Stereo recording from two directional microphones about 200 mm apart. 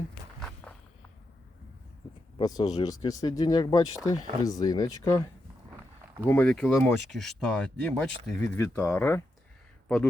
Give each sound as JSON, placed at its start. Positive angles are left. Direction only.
{"t": 2.4, "sound": "speech", "side_deg": 20}
{"t": 6.2, "sound": "speech", "side_deg": 10}